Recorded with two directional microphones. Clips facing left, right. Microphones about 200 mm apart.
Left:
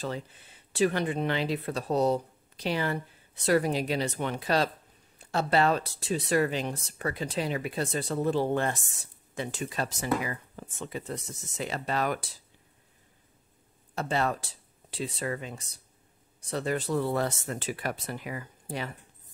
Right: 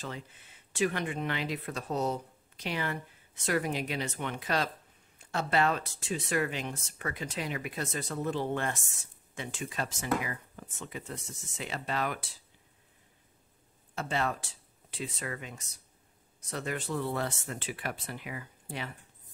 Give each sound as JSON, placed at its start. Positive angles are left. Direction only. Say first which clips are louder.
{"t": 0.0, "sound": "speech", "louder": "left 6 dB", "side_deg": 35}
{"t": 13.9, "sound": "speech", "louder": "left 4 dB", "side_deg": 40}